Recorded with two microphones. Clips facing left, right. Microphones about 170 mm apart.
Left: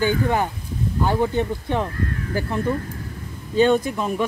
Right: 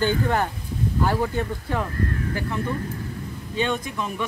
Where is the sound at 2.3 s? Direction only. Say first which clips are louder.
Left 7 dB; 35° left (ahead or behind).